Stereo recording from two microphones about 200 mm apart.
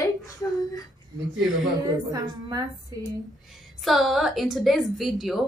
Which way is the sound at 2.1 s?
20° right (ahead or behind).